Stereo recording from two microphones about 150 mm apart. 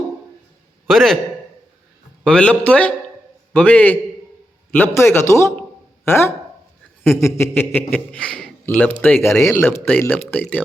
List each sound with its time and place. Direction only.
0.9 s a man's voice: centre (ahead or behind)
2.2 s a man's voice: 10° left (ahead or behind)